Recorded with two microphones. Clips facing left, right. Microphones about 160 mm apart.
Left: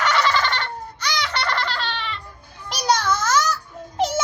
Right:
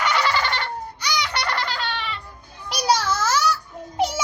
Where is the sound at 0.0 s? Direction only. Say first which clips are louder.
Left 2 dB; 10° right (ahead or behind).